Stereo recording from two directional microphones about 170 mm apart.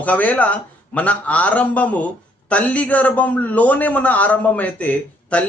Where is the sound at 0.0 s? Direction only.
10° left (ahead or behind).